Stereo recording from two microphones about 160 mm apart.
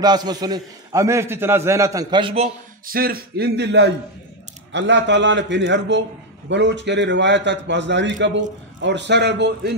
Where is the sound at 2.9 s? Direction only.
65° right (ahead or behind).